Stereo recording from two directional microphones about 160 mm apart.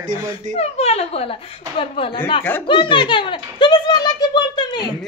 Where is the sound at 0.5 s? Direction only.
40° left (ahead or behind).